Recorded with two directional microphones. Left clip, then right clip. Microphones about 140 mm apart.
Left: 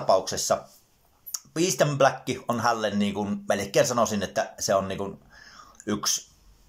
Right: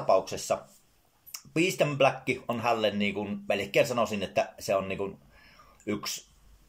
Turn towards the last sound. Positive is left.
turn(degrees=-15)  # may be behind; listen again after turning